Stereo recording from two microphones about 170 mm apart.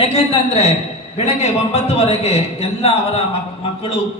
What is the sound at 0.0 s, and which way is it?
A man's voice, 40° left (ahead or behind).